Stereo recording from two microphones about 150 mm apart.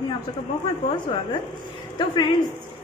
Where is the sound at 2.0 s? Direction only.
30° left (ahead or behind).